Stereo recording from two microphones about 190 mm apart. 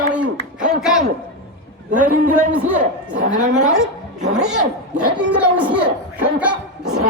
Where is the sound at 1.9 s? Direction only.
45° right (ahead or behind).